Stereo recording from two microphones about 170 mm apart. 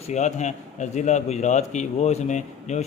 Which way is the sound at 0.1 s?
45° left (ahead or behind).